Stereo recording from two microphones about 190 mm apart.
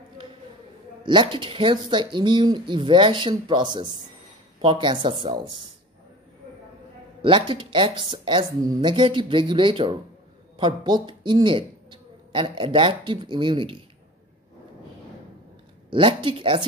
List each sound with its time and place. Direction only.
1.0 s speech: 25° right (ahead or behind)
7.2 s a man's voice: 25° right (ahead or behind)
15.9 s speech: 25° right (ahead or behind)